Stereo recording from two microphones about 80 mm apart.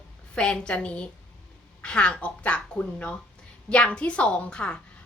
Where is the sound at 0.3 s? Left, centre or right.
Centre.